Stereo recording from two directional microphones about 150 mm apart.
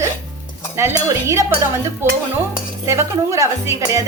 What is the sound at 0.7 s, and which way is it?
Dishes, 20° right (ahead or behind).